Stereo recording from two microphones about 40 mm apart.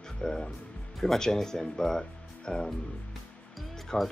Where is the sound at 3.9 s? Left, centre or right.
Centre.